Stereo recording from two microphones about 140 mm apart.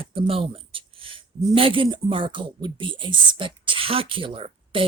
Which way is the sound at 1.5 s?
40° right (ahead or behind).